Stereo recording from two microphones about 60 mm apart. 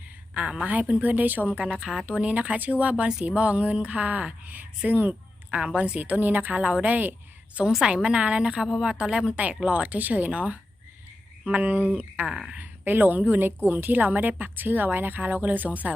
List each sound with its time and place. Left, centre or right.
0.3 s a woman's voice: centre
1.6 s a woman's voice: centre
2.0 s a woman's voice: right
6.6 s a woman's voice: centre
7.9 s a woman's voice: centre
12.3 s a woman's voice: centre
12.5 s a woman's voice: right